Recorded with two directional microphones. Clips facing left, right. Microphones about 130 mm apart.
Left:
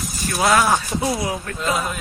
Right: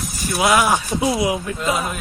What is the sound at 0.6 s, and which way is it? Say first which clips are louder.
Speech: right 1 dB; 15° right (ahead or behind).